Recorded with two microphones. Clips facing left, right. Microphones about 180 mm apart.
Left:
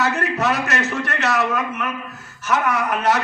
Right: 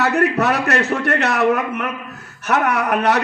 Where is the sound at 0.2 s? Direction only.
65° right (ahead or behind).